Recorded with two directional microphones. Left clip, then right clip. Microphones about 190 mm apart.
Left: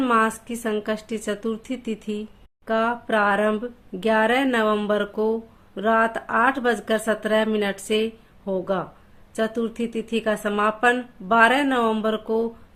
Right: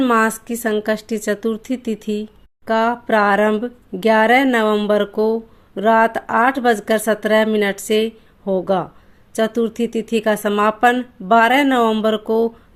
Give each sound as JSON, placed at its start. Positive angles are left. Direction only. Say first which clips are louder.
{"t": 0.0, "sound": "speech", "louder": "right 4 dB", "side_deg": -35}